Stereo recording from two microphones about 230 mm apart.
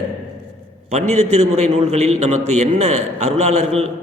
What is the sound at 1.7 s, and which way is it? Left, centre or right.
Speech, right.